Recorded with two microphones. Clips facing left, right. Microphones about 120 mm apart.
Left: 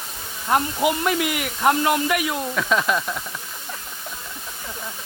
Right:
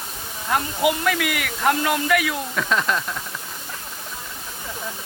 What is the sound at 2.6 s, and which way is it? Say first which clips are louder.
Speech: left 1 dB; 5° left (ahead or behind).